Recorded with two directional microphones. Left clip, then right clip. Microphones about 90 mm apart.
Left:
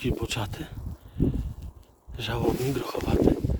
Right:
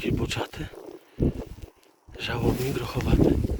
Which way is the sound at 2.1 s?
90° left.